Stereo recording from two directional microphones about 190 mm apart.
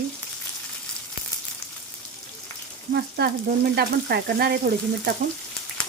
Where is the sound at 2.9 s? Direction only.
60° right (ahead or behind).